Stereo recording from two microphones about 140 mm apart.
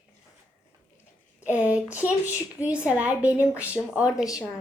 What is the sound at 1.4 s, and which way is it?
A woman's voice, 10° right (ahead or behind).